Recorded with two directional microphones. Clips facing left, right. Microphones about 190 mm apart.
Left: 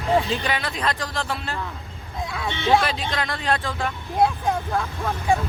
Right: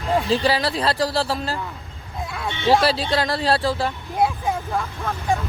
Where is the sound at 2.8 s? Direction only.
35° right (ahead or behind).